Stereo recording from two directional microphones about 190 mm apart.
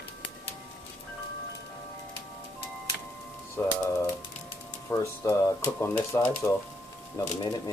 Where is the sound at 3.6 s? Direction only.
15° left (ahead or behind).